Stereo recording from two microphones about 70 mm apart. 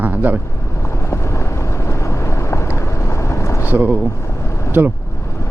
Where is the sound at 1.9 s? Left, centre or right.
Left.